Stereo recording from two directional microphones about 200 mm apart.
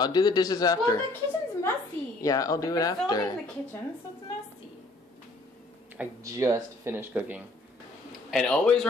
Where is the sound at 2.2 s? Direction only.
15° left (ahead or behind).